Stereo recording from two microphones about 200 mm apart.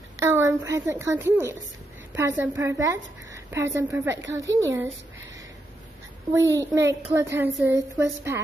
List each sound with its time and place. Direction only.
0.2 s a woman's voice: 15° right (ahead or behind)
6.3 s a woman's voice: 15° right (ahead or behind)